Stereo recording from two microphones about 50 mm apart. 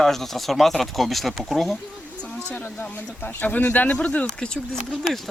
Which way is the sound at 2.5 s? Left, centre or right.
Left.